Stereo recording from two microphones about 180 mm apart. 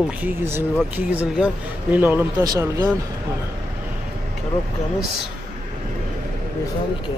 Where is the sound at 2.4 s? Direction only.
20° right (ahead or behind).